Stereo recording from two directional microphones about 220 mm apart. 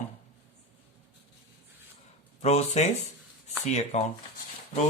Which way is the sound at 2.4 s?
30° left (ahead or behind).